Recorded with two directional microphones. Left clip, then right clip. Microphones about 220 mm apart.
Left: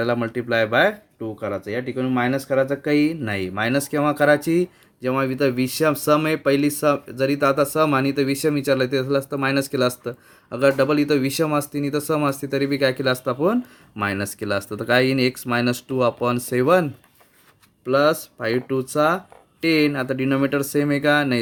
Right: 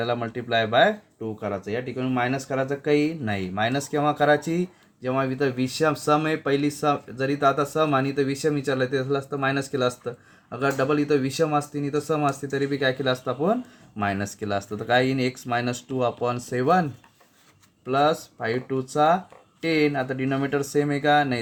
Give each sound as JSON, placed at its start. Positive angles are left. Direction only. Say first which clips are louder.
{"t": 0.0, "sound": "speech", "louder": "left 4 dB", "side_deg": 50}
{"t": 17.8, "sound": "speech", "louder": "left 3 dB", "side_deg": 55}